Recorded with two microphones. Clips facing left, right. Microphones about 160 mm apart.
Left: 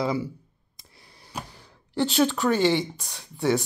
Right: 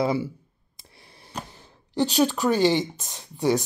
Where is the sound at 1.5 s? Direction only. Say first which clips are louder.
Even; 20° right (ahead or behind).